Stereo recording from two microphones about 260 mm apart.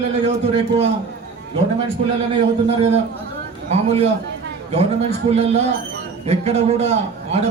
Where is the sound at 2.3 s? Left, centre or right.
Right.